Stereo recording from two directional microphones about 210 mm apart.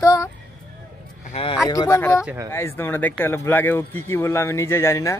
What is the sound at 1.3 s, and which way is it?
Speech, 25° left (ahead or behind).